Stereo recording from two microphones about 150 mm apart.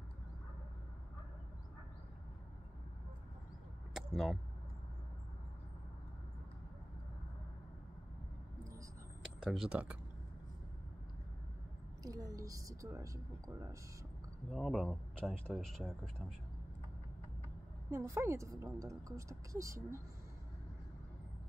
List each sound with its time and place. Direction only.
3.9 s a sound: centre (ahead or behind)
9.4 s speech: centre (ahead or behind)
12.0 s a woman's voice: 25° right (ahead or behind)
14.5 s speech: 5° left (ahead or behind)
17.9 s a woman's voice: 20° right (ahead or behind)